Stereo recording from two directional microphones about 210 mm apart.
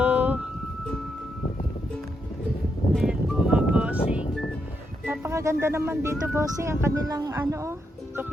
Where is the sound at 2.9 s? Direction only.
Centre (ahead or behind).